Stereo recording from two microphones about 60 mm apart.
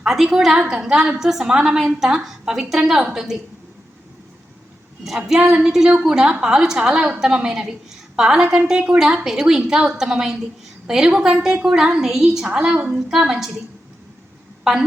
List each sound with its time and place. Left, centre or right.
0.0 s a woman's voice: centre
5.0 s a woman's voice: centre
5.4 s a woman's voice: right
5.6 s a woman's voice: centre
14.6 s a woman's voice: centre